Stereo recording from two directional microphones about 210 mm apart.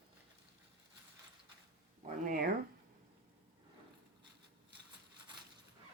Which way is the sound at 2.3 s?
40° right (ahead or behind).